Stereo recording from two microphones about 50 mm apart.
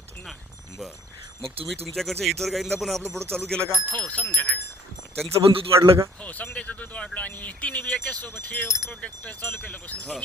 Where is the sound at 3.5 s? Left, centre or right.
Right.